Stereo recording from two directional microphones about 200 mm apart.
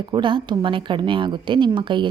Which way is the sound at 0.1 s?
25° right (ahead or behind).